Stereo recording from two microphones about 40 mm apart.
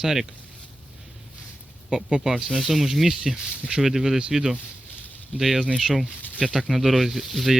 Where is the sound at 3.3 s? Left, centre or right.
Right.